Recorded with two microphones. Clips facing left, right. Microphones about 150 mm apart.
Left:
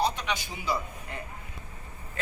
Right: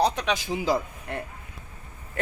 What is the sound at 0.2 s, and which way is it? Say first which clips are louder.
Speech: right 7 dB; 90° right.